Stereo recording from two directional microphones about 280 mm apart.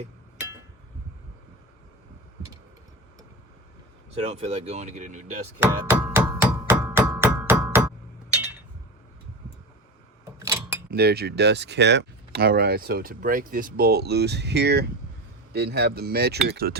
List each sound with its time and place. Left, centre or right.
4.1 s speech: right
5.6 s music: centre
10.4 s a sound: centre
10.9 s speech: right